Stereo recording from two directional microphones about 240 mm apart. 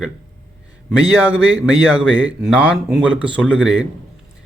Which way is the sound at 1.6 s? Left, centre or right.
Centre.